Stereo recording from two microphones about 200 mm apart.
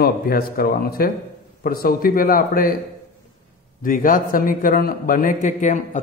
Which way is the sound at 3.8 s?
45° left (ahead or behind).